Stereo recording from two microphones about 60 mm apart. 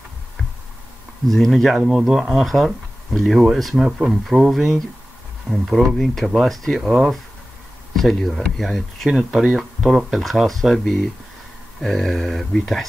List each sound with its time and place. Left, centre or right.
1.2 s speech: centre
1.8 s speech: centre
7.9 s speech: centre